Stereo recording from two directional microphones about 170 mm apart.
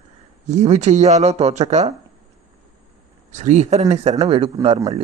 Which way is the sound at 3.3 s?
45° right (ahead or behind).